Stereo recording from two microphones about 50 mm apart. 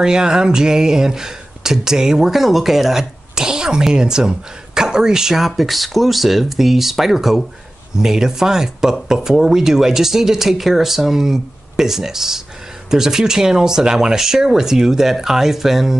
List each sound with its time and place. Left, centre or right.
0.0 s speech: centre